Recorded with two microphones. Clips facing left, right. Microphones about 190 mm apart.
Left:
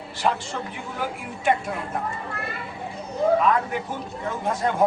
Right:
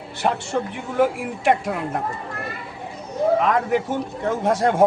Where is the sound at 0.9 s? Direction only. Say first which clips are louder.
Right 12 dB; 70° right (ahead or behind).